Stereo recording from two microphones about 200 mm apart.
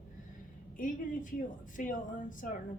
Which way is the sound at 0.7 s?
40° left (ahead or behind).